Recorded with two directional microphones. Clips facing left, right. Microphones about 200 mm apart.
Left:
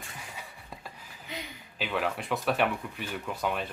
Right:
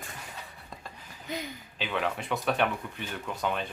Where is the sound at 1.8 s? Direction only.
Centre (ahead or behind).